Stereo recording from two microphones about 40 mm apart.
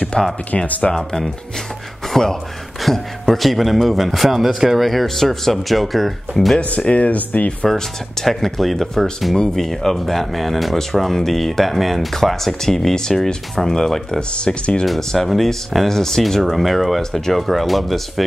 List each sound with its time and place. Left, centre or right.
0.1 s speech: left
0.7 s speech: left
0.9 s a man's voice: centre
6.9 s speech: left
7.6 s a man's voice: centre
14.3 s speech: left
15.0 s a man's voice: centre